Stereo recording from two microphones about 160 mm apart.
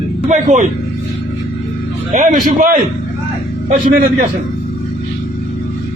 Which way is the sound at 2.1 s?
45° right (ahead or behind).